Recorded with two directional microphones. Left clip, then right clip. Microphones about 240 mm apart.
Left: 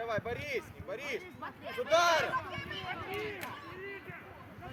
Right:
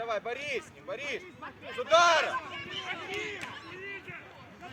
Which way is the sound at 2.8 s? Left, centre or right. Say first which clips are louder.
Right 3 dB; right.